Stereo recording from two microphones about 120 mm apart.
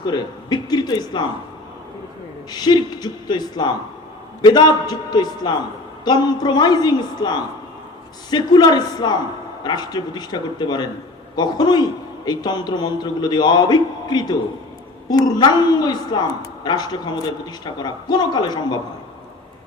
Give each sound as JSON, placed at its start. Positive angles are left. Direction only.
{"t": 0.0, "sound": "a woman's voice", "side_deg": 35}
{"t": 2.5, "sound": "a woman's voice", "side_deg": 35}